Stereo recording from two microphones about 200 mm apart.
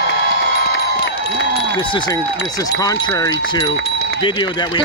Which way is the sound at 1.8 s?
25° left (ahead or behind).